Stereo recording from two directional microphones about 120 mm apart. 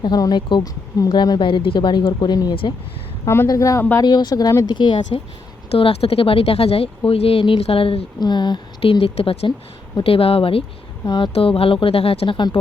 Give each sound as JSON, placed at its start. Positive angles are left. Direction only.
{"t": 0.0, "sound": "speech", "side_deg": 35}
{"t": 3.2, "sound": "speech", "side_deg": 25}
{"t": 5.7, "sound": "speech", "side_deg": 55}
{"t": 8.2, "sound": "speech", "side_deg": 35}
{"t": 8.8, "sound": "speech", "side_deg": 50}
{"t": 11.0, "sound": "speech", "side_deg": 35}
{"t": 11.3, "sound": "speech", "side_deg": 55}